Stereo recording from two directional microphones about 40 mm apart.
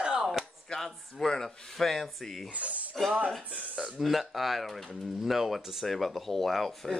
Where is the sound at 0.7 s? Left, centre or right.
Centre.